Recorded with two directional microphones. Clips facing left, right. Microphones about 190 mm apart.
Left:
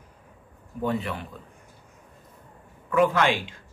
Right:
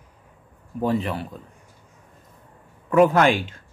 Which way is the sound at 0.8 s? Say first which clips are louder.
Right 4 dB; 35° right (ahead or behind).